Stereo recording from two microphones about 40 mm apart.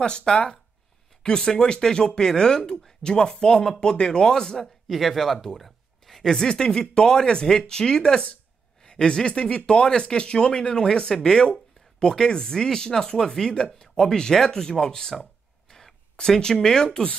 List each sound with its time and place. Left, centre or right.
0.0 s speech: left
4.9 s speech: centre
5.6 s a sound: centre
6.4 s speech: left